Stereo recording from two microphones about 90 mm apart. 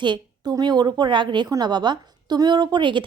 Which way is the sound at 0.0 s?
60° right (ahead or behind).